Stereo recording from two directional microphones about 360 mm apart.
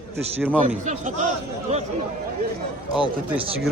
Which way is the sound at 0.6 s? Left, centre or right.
Centre.